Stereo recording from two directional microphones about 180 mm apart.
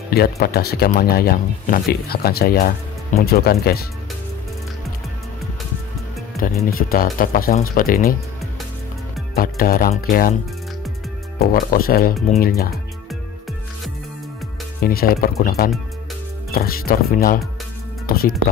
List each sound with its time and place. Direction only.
0.1 s speech: 60° left (ahead or behind)
6.4 s speech: 50° left (ahead or behind)
9.4 s speech: 55° left (ahead or behind)
11.3 s speech: 50° left (ahead or behind)
14.8 s speech: 55° left (ahead or behind)